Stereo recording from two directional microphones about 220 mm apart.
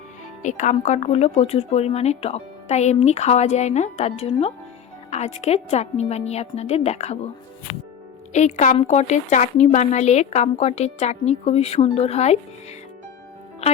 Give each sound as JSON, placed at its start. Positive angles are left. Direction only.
{"t": 0.4, "sound": "a woman's voice", "side_deg": 35}
{"t": 8.3, "sound": "a woman's voice", "side_deg": 30}